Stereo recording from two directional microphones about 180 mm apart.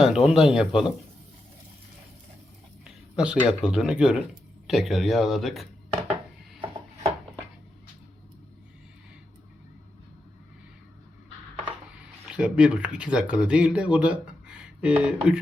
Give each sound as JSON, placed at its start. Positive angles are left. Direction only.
{"t": 0.0, "sound": "speech", "side_deg": -5}
{"t": 2.8, "sound": "speech", "side_deg": -5}
{"t": 6.6, "sound": "a sound", "side_deg": -35}
{"t": 12.3, "sound": "speech", "side_deg": -5}